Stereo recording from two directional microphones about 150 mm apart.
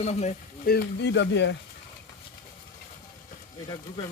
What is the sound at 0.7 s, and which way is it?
Speech, 80° left.